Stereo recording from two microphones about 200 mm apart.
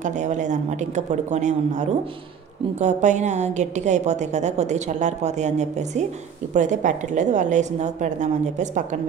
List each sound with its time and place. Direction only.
0.0 s a woman's voice: 35° right (ahead or behind)